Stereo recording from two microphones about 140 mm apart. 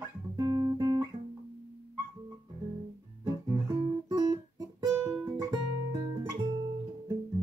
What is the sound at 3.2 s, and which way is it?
Guitar, 25° right (ahead or behind).